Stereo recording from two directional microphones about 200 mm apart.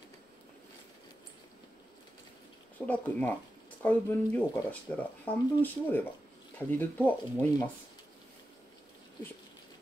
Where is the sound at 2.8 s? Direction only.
5° left (ahead or behind).